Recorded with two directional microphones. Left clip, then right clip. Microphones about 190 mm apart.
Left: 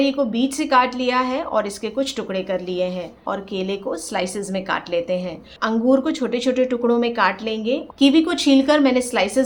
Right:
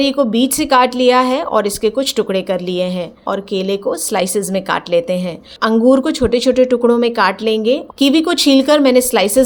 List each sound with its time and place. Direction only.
0.0 s speech: 40° right (ahead or behind)